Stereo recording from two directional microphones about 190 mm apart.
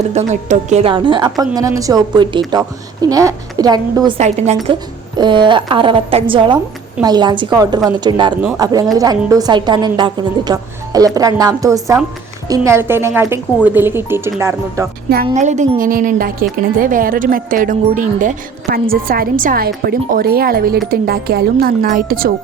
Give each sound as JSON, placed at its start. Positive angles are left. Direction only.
{"t": 0.1, "sound": "a woman's voice", "side_deg": -35}
{"t": 4.2, "sound": "a woman's voice", "side_deg": -35}
{"t": 4.6, "sound": "a woman's voice", "side_deg": -25}
{"t": 15.4, "sound": "a woman's voice", "side_deg": -40}